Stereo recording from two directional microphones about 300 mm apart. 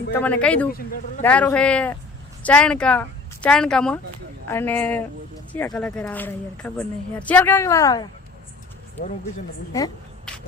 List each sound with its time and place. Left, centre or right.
0.1 s a man's voice: centre
0.7 s speech: left
1.2 s a man's voice: centre
9.7 s a sound: centre